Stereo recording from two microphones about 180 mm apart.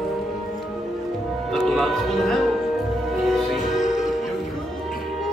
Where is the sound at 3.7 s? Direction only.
40° left (ahead or behind).